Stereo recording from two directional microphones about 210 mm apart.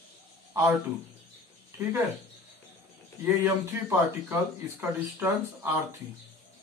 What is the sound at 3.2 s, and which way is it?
Speech, 10° right (ahead or behind).